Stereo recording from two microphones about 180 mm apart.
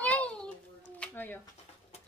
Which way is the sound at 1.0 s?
10° left (ahead or behind).